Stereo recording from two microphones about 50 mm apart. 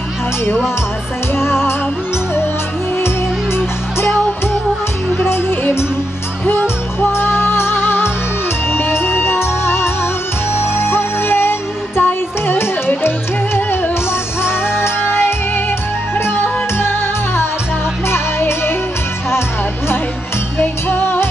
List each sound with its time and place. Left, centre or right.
1.3 s music: left
5.2 s music: left
14.8 s music: left
18.0 s music: left
20.5 s music: left